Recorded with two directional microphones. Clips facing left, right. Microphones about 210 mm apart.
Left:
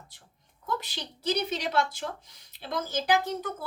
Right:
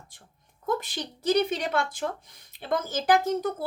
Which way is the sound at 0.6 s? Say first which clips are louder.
Right 5 dB; 50° right (ahead or behind).